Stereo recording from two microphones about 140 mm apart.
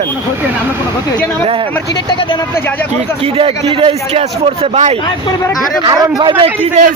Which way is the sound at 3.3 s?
40° right (ahead or behind).